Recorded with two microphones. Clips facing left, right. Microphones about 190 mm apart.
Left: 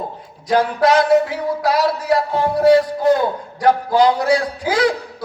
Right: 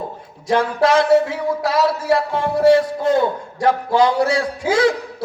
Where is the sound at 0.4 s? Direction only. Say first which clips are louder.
Left 1 dB; 25° right (ahead or behind).